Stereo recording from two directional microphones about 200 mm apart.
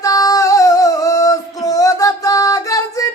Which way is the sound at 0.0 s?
15° left (ahead or behind).